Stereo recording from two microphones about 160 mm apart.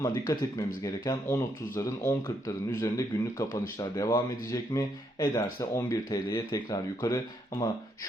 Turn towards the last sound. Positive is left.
turn(degrees=20)  # may be behind; listen again after turning